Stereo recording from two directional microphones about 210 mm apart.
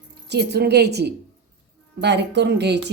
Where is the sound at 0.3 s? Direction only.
50° right (ahead or behind).